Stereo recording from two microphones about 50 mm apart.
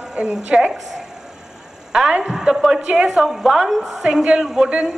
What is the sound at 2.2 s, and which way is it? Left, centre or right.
A man's voice, centre.